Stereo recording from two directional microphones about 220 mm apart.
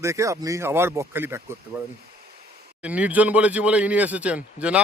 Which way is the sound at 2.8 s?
5° right (ahead or behind).